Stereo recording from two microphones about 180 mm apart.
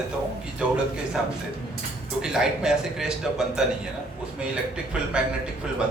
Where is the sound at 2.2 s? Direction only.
5° right (ahead or behind).